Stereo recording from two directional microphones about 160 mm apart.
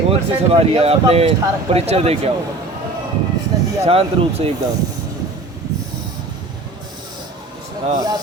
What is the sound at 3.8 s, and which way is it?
Speech, 40° right (ahead or behind).